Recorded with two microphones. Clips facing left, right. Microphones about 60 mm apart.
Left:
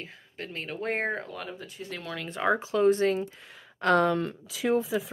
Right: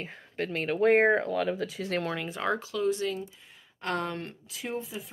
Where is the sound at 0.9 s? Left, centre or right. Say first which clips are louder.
Right 7 dB; right.